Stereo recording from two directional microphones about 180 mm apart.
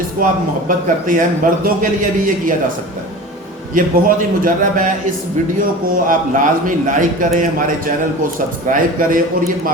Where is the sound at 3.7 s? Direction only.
50° right (ahead or behind).